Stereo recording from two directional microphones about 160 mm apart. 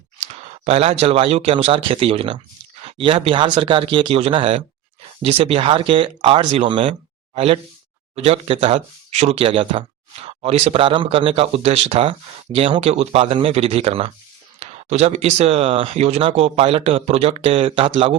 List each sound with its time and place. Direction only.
0.6 s speech: 40° right (ahead or behind)